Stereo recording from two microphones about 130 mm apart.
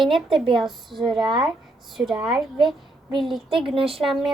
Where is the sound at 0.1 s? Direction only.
Centre (ahead or behind).